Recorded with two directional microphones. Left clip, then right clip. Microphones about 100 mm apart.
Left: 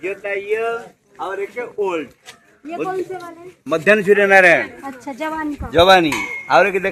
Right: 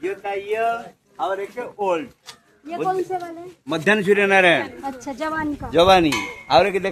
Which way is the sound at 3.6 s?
25° right (ahead or behind).